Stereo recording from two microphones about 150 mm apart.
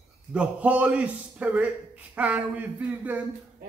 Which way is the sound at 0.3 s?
10° right (ahead or behind).